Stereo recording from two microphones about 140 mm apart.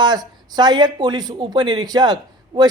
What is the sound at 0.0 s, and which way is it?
Speech, 30° right (ahead or behind).